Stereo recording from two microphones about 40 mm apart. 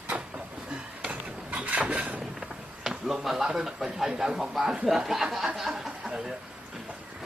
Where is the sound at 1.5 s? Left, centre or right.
Right.